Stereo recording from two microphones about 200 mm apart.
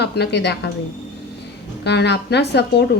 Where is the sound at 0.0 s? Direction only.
55° left (ahead or behind).